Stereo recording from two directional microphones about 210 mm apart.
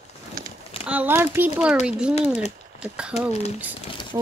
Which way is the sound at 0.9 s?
10° right (ahead or behind).